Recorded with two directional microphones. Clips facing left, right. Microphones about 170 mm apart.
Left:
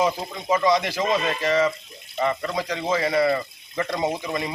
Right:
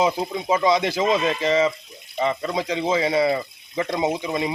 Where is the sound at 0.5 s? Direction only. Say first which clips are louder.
Right 1 dB; 25° right (ahead or behind).